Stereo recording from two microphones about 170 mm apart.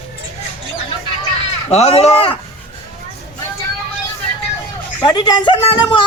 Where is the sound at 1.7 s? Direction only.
35° left (ahead or behind).